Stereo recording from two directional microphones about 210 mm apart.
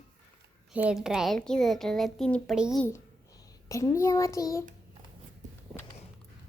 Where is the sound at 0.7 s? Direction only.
5° right (ahead or behind).